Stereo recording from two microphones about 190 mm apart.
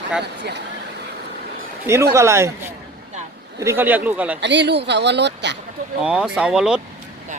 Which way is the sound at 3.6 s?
15° right (ahead or behind).